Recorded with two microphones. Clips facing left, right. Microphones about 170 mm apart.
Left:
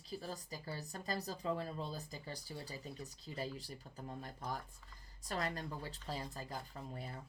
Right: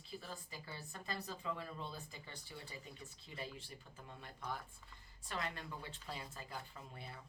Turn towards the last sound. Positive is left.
turn(degrees=40)  # may be behind; listen again after turning